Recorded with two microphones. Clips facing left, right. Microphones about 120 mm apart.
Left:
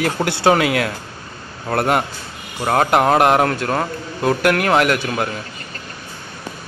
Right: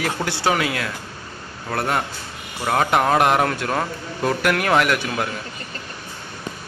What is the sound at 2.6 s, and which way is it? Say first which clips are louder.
Speech: left 3 dB; 25° left (ahead or behind).